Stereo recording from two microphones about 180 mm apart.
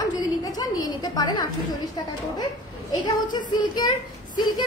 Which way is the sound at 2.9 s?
25° left (ahead or behind).